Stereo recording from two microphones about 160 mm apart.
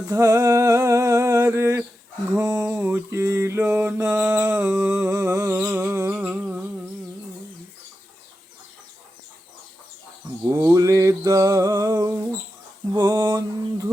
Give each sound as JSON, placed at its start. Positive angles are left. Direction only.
{"t": 0.1, "sound": "humming", "side_deg": -20}
{"t": 2.3, "sound": "mantra", "side_deg": -15}
{"t": 10.5, "sound": "a sound", "side_deg": -20}